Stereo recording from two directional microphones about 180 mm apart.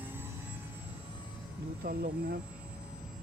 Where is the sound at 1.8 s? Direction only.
55° right (ahead or behind).